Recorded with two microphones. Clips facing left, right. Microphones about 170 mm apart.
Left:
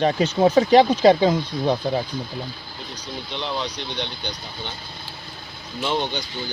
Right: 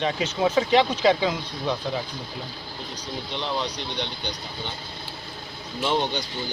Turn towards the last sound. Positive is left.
turn(degrees=0)  # may be behind; listen again after turning